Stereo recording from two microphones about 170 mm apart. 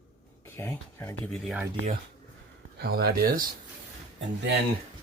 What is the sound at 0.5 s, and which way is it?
Speech, 15° left (ahead or behind).